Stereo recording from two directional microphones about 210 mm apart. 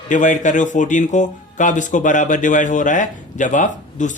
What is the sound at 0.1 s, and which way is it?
A man's voice, 35° left (ahead or behind).